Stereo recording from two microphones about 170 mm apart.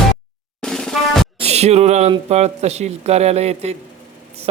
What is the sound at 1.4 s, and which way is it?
Speech, 40° right (ahead or behind).